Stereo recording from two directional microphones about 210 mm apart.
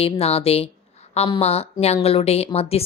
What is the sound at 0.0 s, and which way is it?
A woman's voice, 30° left (ahead or behind).